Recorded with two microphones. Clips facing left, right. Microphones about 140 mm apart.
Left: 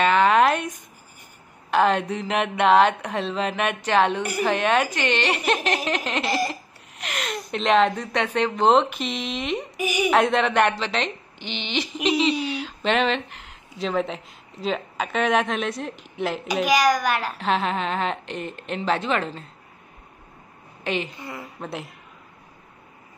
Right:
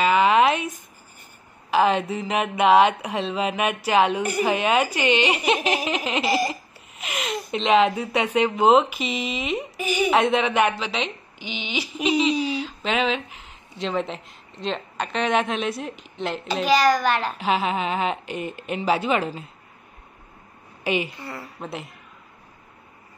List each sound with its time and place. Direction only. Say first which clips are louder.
0.0 s a sound: even; 5° right (ahead or behind)
1.7 s speech: even; centre (ahead or behind)
4.2 s speech: right 2 dB; 5° left (ahead or behind)
4.5 s speech: left 1 dB; 10° right (ahead or behind)
9.8 s a child's voice: right 1 dB; 10° left (ahead or behind)
10.1 s a woman's voice: left 1 dB; centre (ahead or behind)
17.4 s speech: right 1 dB; 5° right (ahead or behind)
20.8 s a woman's voice: right 2 dB; 10° right (ahead or behind)
21.2 s a child's voice: even; 15° left (ahead or behind)
21.5 s speech: left 2 dB; centre (ahead or behind)